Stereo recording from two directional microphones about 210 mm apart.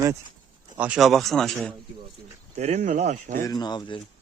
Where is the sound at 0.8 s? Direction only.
5° right (ahead or behind).